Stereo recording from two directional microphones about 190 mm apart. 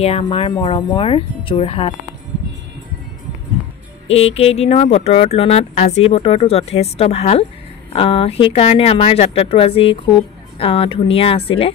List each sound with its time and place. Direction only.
0.2 s speech: 25° left (ahead or behind)
4.1 s speech: 35° left (ahead or behind)